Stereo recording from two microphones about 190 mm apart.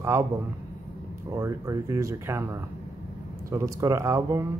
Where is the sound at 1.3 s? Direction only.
20° right (ahead or behind).